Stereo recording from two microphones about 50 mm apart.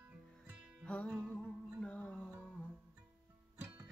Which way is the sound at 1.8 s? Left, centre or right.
Left.